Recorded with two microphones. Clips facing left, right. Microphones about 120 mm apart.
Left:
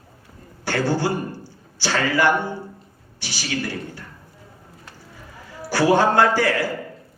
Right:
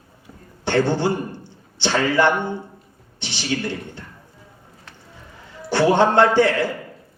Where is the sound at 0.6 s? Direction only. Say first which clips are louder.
Right 3 dB; 20° right (ahead or behind).